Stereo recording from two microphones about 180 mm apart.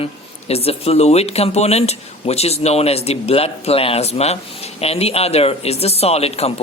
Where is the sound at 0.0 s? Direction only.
35° left (ahead or behind).